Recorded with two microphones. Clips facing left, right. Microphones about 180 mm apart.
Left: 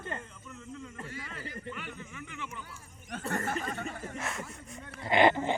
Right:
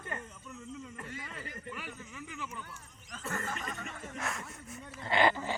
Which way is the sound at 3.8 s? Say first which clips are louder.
Left 6 dB; 30° left (ahead or behind).